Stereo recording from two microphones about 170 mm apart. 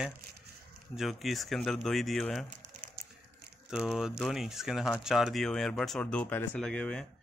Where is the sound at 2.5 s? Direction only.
50° right (ahead or behind).